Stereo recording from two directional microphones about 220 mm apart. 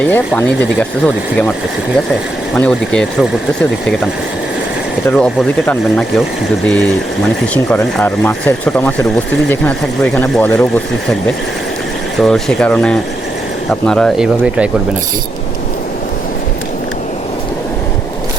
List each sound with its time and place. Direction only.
0.0 s speech: 5° left (ahead or behind)
2.6 s speech: 5° left (ahead or behind)
5.1 s speech: centre (ahead or behind)
12.2 s speech: 5° left (ahead or behind)